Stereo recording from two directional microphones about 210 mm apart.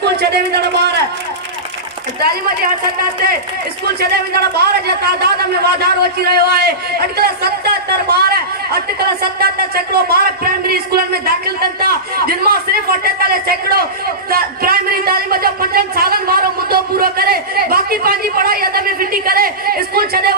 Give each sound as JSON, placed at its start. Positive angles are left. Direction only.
{"t": 0.0, "sound": "a man's voice", "side_deg": -50}
{"t": 4.1, "sound": "a man's voice", "side_deg": -50}